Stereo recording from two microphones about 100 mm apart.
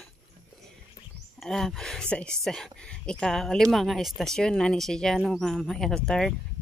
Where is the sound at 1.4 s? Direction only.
5° left (ahead or behind).